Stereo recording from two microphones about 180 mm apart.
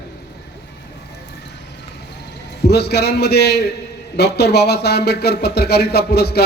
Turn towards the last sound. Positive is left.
turn(degrees=65)  # may be behind; listen again after turning